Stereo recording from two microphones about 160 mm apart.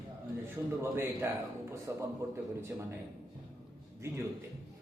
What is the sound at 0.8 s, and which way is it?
A man's voice, 15° right (ahead or behind).